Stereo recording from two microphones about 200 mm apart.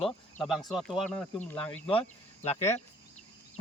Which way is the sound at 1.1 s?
10° left (ahead or behind).